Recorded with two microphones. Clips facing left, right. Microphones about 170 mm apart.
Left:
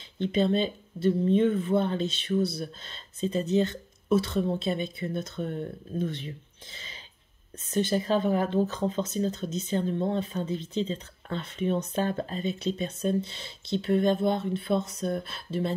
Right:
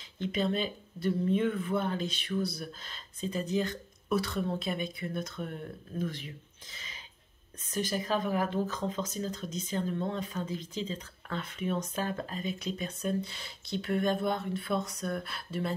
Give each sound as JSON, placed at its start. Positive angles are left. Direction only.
{"t": 0.2, "sound": "speech", "side_deg": 30}